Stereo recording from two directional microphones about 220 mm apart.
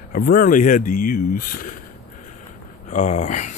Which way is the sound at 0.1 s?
40° left (ahead or behind).